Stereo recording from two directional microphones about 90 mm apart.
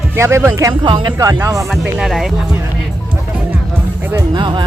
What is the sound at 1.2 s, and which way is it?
Speech, 40° right (ahead or behind).